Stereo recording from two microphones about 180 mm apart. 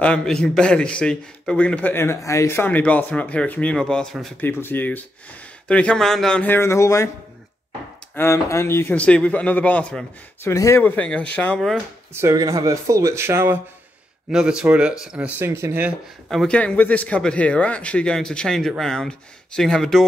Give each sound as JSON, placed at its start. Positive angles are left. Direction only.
{"t": 0.0, "sound": "a man's voice", "side_deg": 5}
{"t": 8.2, "sound": "a man's voice", "side_deg": 15}
{"t": 12.2, "sound": "speech", "side_deg": -15}
{"t": 16.3, "sound": "speech", "side_deg": 5}